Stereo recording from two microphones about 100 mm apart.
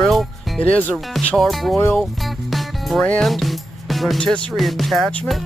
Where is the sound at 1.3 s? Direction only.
Centre (ahead or behind).